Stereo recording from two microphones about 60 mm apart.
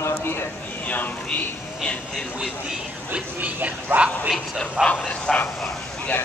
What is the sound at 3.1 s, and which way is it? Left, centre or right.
Speech, right.